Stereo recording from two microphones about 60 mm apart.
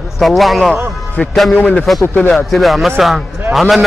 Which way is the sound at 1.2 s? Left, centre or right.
Left.